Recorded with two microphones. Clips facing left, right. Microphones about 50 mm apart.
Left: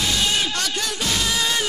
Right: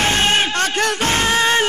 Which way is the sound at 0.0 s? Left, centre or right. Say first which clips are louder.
Right 6 dB; right.